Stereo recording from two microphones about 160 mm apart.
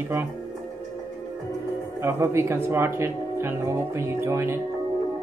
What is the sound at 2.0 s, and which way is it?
Speech, 15° right (ahead or behind).